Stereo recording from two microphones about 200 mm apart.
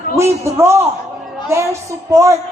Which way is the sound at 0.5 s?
15° right (ahead or behind).